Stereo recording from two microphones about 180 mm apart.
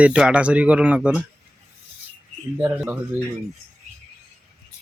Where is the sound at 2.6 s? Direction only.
10° right (ahead or behind).